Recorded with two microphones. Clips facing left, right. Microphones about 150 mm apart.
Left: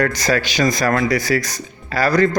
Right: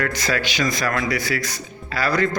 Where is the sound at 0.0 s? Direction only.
40° left (ahead or behind).